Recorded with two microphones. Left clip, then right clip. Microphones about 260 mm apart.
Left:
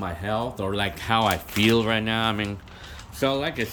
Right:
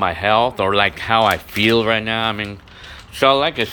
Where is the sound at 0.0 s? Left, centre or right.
Centre.